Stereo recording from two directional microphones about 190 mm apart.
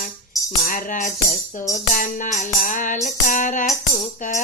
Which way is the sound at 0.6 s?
45° left (ahead or behind).